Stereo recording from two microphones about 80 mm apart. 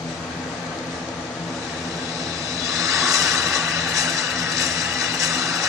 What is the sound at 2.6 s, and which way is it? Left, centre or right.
Vehicle, right.